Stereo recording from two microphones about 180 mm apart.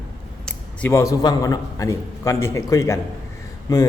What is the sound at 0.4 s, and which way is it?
A man's voice, 10° left (ahead or behind).